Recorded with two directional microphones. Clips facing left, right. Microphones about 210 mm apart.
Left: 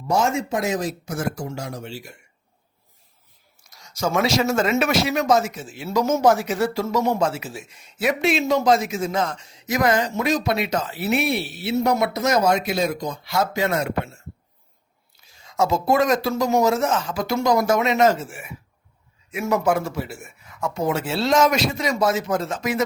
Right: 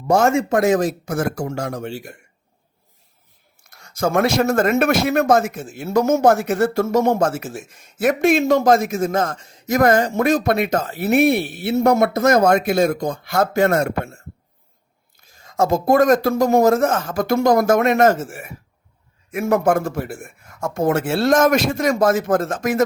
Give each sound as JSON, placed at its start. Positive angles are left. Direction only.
{"t": 0.1, "sound": "speech", "side_deg": -50}
{"t": 3.6, "sound": "speech", "side_deg": -55}
{"t": 15.2, "sound": "speech", "side_deg": -50}